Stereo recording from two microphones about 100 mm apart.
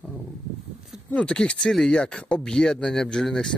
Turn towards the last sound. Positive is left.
turn(degrees=5)  # may be behind; listen again after turning